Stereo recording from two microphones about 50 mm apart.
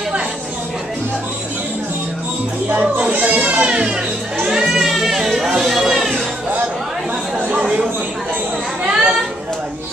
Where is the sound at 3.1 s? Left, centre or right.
Right; by 5.2 s centre.